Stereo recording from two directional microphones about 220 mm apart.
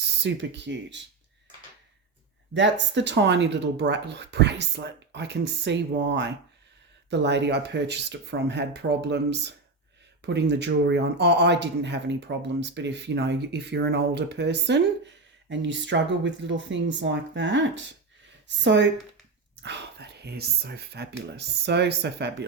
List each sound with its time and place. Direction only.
0.2 s speech: 50° right (ahead or behind)
2.5 s speech: 55° right (ahead or behind)